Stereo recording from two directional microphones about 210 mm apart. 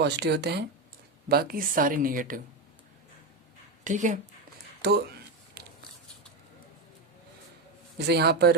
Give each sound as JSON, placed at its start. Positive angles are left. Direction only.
{"t": 0.0, "sound": "speech", "side_deg": -50}
{"t": 3.8, "sound": "speech", "side_deg": -35}
{"t": 4.8, "sound": "speech", "side_deg": -50}
{"t": 5.6, "sound": "a sound", "side_deg": -50}
{"t": 7.9, "sound": "speech", "side_deg": -50}